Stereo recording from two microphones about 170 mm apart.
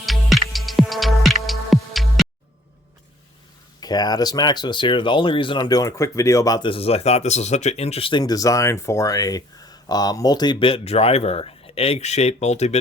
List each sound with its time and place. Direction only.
0.0 s music: centre (ahead or behind)
3.8 s speech: 25° left (ahead or behind); by 12.8 s 40° left (ahead or behind)